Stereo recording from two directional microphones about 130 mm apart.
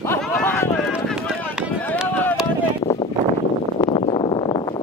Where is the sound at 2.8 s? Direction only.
45° left (ahead or behind).